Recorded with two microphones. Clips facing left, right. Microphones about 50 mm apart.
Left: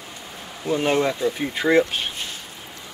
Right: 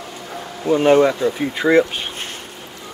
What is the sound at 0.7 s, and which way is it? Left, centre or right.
Speech, right.